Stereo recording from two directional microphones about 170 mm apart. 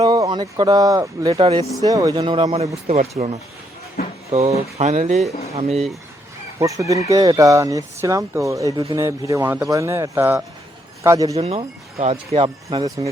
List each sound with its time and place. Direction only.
0.0 s a sound: 25° right (ahead or behind)
0.5 s speech: 20° right (ahead or behind); by 5.8 s 40° right (ahead or behind)
6.6 s speech: 20° right (ahead or behind)
11.3 s speech: 35° right (ahead or behind)